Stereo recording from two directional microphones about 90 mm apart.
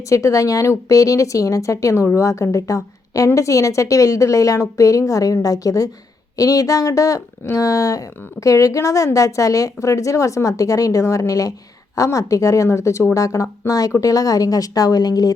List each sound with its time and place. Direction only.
0.1 s speech: 35° left (ahead or behind)